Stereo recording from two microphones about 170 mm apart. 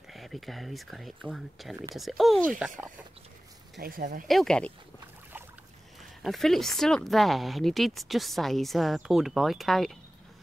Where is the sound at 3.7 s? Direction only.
55° right (ahead or behind).